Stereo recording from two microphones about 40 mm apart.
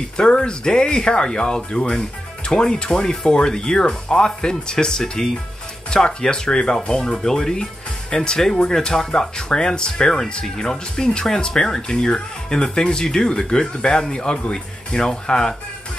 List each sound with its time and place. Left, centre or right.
0.2 s speech: left